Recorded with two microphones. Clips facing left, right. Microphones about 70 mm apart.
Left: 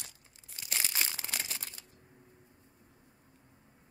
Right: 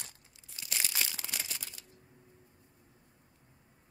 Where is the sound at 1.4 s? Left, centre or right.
Left.